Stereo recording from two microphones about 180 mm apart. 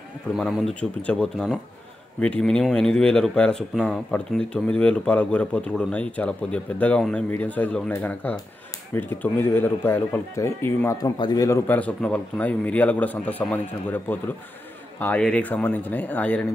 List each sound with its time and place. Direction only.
0.4 s speech: centre (ahead or behind)